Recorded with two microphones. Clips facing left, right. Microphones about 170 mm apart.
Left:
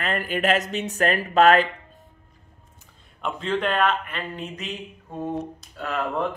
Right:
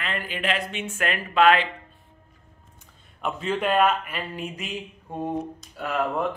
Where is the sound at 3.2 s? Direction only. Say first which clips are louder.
Even; 5° right (ahead or behind).